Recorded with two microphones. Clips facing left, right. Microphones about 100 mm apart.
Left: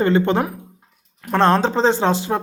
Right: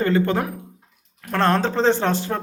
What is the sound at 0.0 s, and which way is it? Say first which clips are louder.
Speech: left 3 dB; 25° left (ahead or behind).